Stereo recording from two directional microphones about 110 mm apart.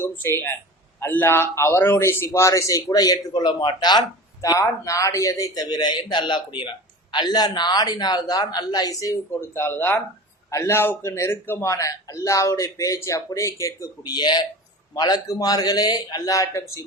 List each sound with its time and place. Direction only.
0.0 s a man's voice: 20° left (ahead or behind)